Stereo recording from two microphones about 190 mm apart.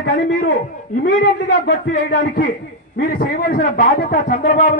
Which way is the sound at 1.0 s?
55° left (ahead or behind).